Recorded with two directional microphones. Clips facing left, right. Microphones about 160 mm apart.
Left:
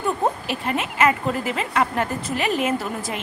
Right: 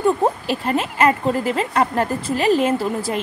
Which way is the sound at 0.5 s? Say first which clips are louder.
Right 4 dB; 35° right (ahead or behind).